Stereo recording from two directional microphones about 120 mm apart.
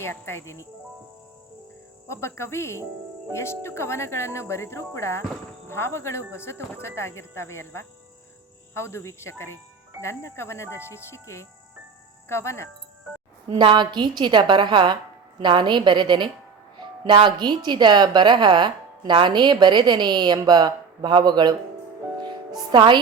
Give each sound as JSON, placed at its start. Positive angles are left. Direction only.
{"t": 0.0, "sound": "speech", "side_deg": 20}
{"t": 2.0, "sound": "speech", "side_deg": 20}
{"t": 13.6, "sound": "a woman's voice", "side_deg": -40}
{"t": 22.7, "sound": "a woman's voice", "side_deg": -40}